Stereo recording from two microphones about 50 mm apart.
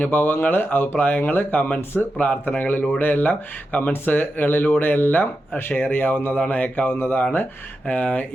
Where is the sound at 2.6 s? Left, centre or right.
Left.